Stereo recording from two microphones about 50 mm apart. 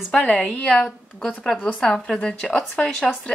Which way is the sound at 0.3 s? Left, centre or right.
Left.